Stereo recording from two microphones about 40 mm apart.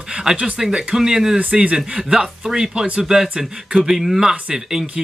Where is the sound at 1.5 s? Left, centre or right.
Right.